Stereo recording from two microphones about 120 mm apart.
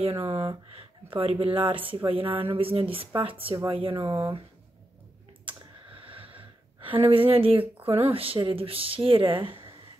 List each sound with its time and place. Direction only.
0.2 s speech: 50° right (ahead or behind)
5.4 s clicking: 45° right (ahead or behind)
6.9 s speech: 50° right (ahead or behind)